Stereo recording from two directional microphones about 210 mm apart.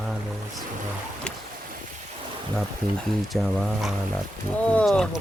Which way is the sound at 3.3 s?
Centre (ahead or behind).